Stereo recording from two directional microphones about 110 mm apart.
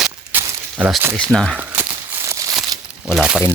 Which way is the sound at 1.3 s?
Centre (ahead or behind).